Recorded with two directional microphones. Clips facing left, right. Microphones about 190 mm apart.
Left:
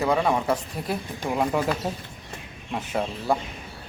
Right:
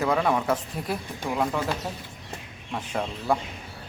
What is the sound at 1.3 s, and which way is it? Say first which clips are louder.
Speech: left 2 dB; 15° left (ahead or behind).